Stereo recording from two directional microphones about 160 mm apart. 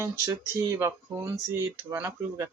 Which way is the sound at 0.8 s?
20° right (ahead or behind).